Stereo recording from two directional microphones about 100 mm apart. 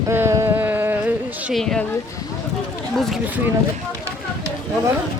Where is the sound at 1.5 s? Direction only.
5° left (ahead or behind).